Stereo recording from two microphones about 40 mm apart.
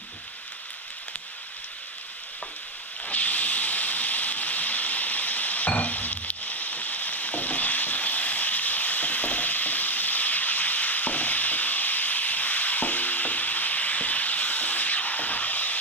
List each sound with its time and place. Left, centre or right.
3.1 s hiss: left